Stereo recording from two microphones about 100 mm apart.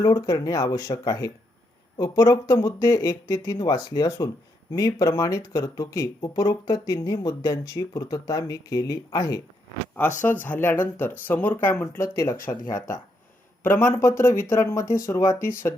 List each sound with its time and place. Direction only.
0.0 s speech: 35° left (ahead or behind)
9.9 s speech: 15° left (ahead or behind)